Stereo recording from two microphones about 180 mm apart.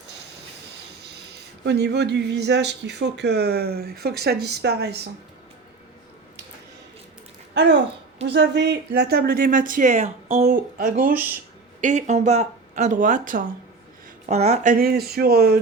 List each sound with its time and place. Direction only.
1.6 s speech: 70° right (ahead or behind)
8.2 s speech: 75° right (ahead or behind); by 10.4 s 35° right (ahead or behind)
10.4 s speech: 50° right (ahead or behind)
14.3 s speech: 40° right (ahead or behind); by 15.5 s 55° right (ahead or behind)